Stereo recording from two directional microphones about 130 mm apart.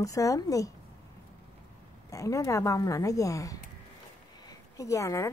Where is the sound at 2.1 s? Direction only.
25° left (ahead or behind).